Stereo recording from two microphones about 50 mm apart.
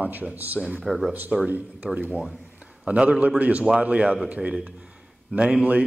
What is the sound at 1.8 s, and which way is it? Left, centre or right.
A man's voice, right.